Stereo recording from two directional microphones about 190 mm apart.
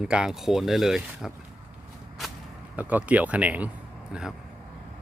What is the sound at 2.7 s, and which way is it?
Speech, 10° right (ahead or behind).